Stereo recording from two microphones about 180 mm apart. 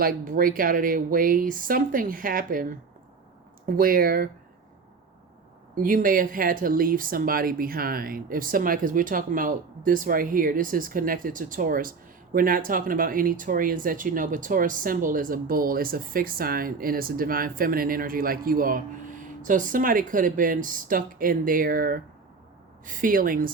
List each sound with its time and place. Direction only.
0.0 s speech: 50° right (ahead or behind)
3.8 s speech: 50° right (ahead or behind)
5.7 s speech: 50° right (ahead or behind)